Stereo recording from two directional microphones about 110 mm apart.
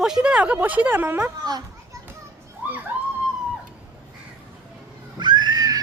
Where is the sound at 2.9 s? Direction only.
15° right (ahead or behind).